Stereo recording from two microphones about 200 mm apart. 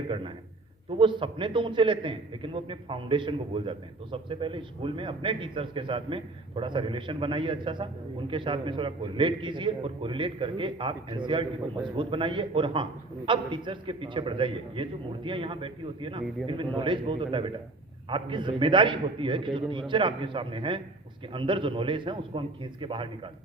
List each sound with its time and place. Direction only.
0.9 s a man's voice: 25° right (ahead or behind)